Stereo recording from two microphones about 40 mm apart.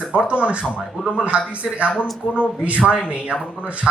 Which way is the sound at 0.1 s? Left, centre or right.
Right.